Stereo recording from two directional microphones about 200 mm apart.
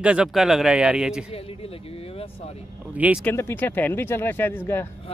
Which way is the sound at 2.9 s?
5° right (ahead or behind).